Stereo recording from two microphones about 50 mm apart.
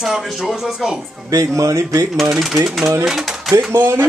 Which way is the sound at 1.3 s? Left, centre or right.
Right.